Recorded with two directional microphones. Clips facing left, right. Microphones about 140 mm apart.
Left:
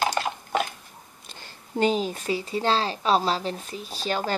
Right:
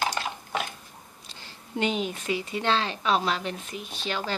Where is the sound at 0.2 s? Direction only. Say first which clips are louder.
Left 5 dB; 45° left (ahead or behind).